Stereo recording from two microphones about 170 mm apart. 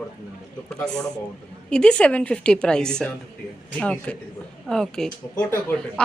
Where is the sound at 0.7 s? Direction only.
5° left (ahead or behind).